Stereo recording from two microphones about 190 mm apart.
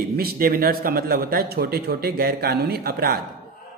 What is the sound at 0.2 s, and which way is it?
A man's voice, 50° right (ahead or behind).